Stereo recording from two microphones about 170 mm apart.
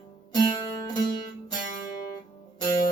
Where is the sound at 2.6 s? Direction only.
25° left (ahead or behind).